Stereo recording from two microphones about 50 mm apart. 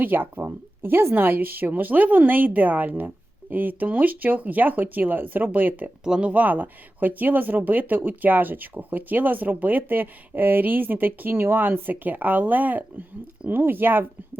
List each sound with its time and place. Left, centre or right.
0.0 s speech: right
6.1 s speech: centre
6.3 s speech: right